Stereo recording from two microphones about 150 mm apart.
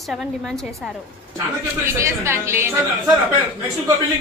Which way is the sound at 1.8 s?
15° right (ahead or behind).